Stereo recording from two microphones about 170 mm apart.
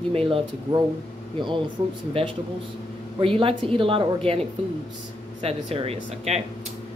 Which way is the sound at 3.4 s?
30° right (ahead or behind).